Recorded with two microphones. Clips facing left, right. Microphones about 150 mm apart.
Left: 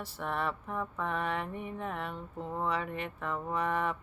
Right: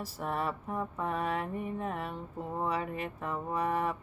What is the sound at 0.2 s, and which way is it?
Mantra, 30° right (ahead or behind).